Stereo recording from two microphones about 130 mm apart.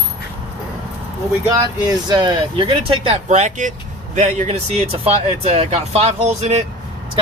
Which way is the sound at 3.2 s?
65° right (ahead or behind).